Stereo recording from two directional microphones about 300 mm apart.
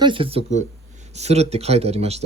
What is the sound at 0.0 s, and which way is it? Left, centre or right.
Speech, centre.